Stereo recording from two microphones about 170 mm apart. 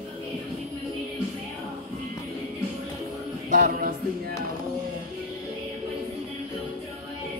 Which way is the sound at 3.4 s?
50° right (ahead or behind).